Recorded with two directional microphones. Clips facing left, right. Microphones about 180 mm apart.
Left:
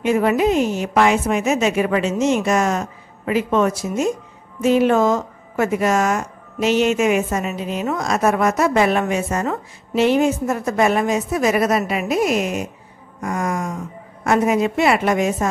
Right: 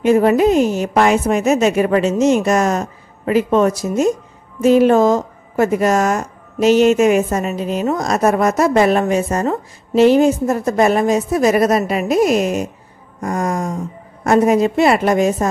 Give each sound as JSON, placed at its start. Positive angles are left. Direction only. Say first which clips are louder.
{"t": 0.0, "sound": "a woman's voice", "louder": "right 5 dB", "side_deg": -40}
{"t": 13.2, "sound": "a sound", "louder": "right 3 dB", "side_deg": -40}
{"t": 14.2, "sound": "a woman's voice", "louder": "right 4 dB", "side_deg": -40}